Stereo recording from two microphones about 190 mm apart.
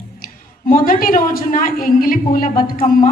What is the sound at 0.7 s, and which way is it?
Speech, 50° left (ahead or behind).